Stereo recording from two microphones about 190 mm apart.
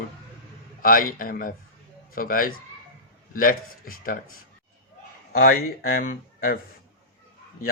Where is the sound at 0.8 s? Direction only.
50° left (ahead or behind).